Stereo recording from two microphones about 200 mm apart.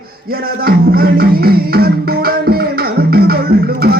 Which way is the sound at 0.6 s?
50° right (ahead or behind).